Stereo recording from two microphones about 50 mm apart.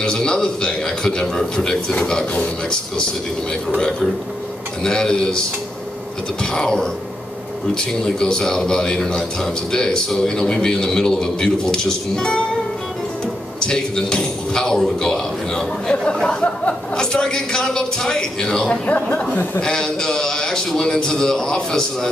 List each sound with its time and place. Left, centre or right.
0.0 s a man's voice: centre
4.8 s a man's voice: centre
6.4 s a man's voice: centre
13.6 s a man's voice: centre
18.9 s speech: left
19.6 s a man's voice: centre